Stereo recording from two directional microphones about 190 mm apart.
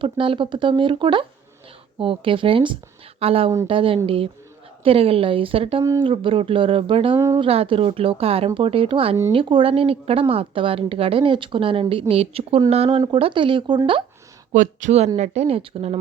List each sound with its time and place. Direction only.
0.0 s speech: 25° right (ahead or behind)
7.2 s speech: 15° right (ahead or behind)
7.4 s speech: 30° right (ahead or behind)
14.5 s speech: 40° right (ahead or behind)